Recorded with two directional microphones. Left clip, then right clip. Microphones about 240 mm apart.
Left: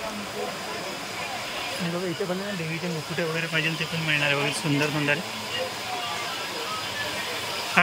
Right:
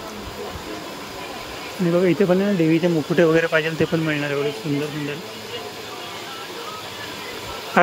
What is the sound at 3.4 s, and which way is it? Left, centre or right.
Speech, right.